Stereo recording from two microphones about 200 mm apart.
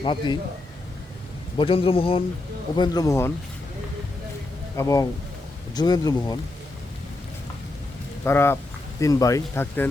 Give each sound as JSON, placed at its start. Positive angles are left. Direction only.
{"t": 0.0, "sound": "a man's voice", "side_deg": 25}
{"t": 1.5, "sound": "a man's voice", "side_deg": 25}
{"t": 4.8, "sound": "a man's voice", "side_deg": 15}
{"t": 8.2, "sound": "speech", "side_deg": 10}